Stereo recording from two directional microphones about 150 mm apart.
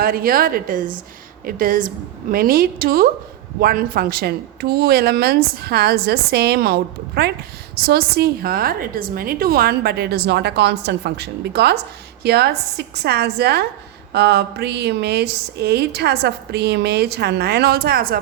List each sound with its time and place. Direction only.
0.0 s a woman's voice: 75° right (ahead or behind)